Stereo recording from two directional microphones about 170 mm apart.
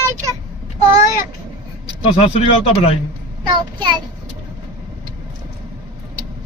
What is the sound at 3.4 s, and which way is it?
Speech, 25° right (ahead or behind).